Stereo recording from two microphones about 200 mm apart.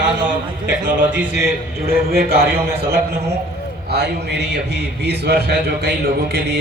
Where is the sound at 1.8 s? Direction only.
50° right (ahead or behind).